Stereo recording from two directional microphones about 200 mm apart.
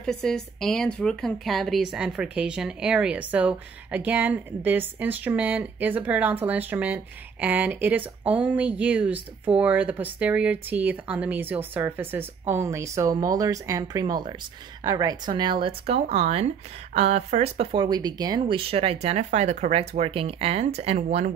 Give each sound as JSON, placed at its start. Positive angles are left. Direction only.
{"t": 0.0, "sound": "speech", "side_deg": 5}
{"t": 17.8, "sound": "speech", "side_deg": -20}